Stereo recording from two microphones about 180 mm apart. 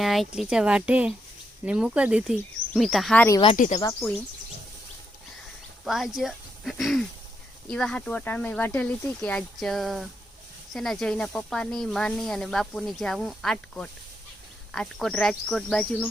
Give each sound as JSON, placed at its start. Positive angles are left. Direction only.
{"t": 0.0, "sound": "speech", "side_deg": 0}
{"t": 3.4, "sound": "speech", "side_deg": 40}
{"t": 5.8, "sound": "speech", "side_deg": 0}